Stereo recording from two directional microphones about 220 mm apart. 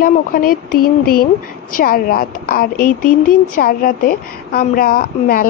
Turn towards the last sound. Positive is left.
turn(degrees=40)  # may be behind; listen again after turning